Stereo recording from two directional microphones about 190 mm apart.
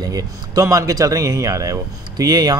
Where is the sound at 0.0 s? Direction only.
20° right (ahead or behind).